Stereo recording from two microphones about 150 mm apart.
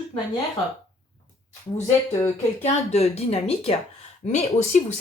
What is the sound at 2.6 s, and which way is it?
Speech, 45° left (ahead or behind).